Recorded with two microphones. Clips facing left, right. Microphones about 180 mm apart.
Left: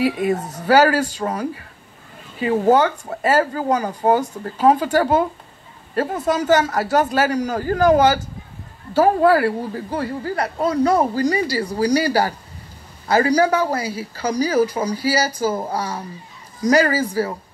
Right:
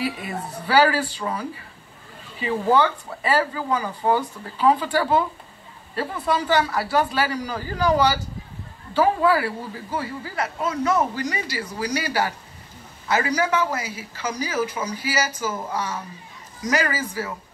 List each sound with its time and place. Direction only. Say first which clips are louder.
0.0 s speech: left 9 dB; 45° left (ahead or behind)
2.6 s speech: left 3 dB; 45° left (ahead or behind)